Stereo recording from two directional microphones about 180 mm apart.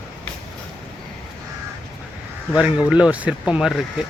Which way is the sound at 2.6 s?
5° right (ahead or behind).